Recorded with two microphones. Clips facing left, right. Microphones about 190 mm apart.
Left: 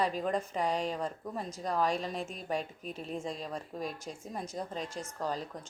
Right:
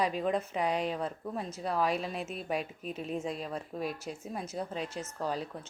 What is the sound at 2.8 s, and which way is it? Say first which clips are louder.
Speech: right 3 dB; 35° left (ahead or behind).